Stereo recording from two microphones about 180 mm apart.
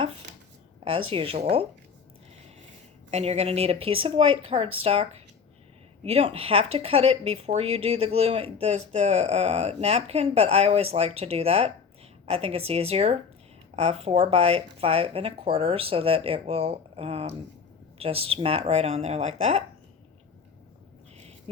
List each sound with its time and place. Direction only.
0.9 s speech: 30° right (ahead or behind)
3.1 s speech: 35° right (ahead or behind)